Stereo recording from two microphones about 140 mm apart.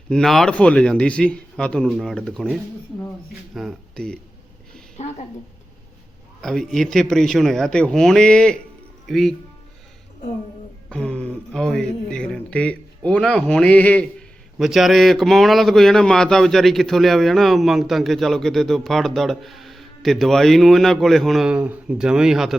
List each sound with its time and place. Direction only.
0.1 s speech: 5° left (ahead or behind)
4.9 s a woman's voice: 55° left (ahead or behind)
6.4 s speech: centre (ahead or behind)
10.8 s speech: 5° left (ahead or behind)